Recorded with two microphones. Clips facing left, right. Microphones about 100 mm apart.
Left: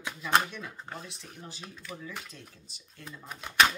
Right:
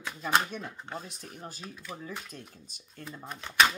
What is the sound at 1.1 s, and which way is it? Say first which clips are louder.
Speech: right 2 dB; 45° right (ahead or behind).